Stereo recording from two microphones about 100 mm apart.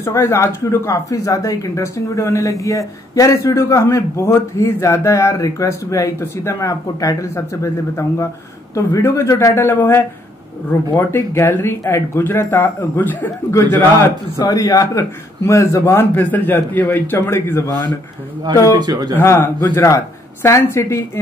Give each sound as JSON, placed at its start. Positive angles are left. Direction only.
{"t": 0.0, "sound": "a man's voice", "side_deg": 25}
{"t": 18.8, "sound": "speech", "side_deg": -45}
{"t": 19.1, "sound": "a man's voice", "side_deg": 25}